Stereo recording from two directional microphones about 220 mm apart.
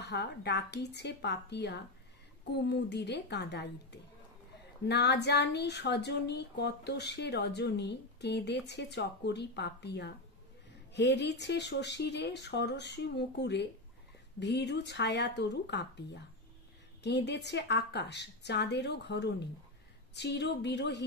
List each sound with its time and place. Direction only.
0.0 s speech: 50° left (ahead or behind)
17.0 s speech: 50° left (ahead or behind)